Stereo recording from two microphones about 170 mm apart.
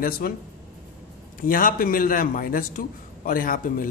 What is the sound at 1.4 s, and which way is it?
Speech, 55° left (ahead or behind).